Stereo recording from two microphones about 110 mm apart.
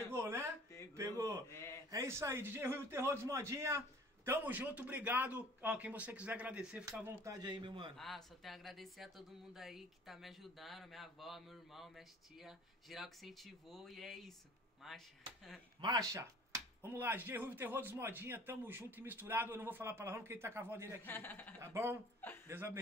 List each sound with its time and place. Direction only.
0.1 s a sound: 25° right (ahead or behind)
1.5 s a sound: 25° left (ahead or behind)
1.9 s a man's voice: 25° right (ahead or behind)
7.2 s a man's voice: 40° right (ahead or behind)
8.0 s speech: centre (ahead or behind)
15.8 s speech: 40° right (ahead or behind)
16.8 s a man's voice: 20° right (ahead or behind)
21.0 s a man's voice: 20° left (ahead or behind)
21.5 s a man's voice: 25° right (ahead or behind)
22.2 s a man's voice: 20° left (ahead or behind)